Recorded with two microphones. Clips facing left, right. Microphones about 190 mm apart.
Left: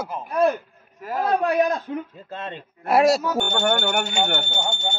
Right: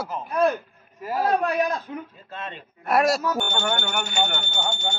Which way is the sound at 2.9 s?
25° left (ahead or behind).